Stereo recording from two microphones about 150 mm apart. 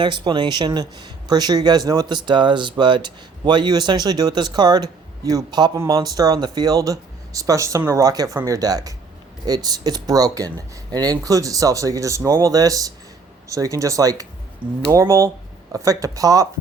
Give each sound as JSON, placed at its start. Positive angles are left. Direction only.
{"t": 0.0, "sound": "speech", "side_deg": -30}